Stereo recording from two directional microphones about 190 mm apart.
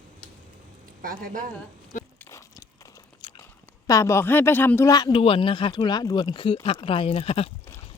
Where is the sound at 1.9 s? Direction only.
40° left (ahead or behind).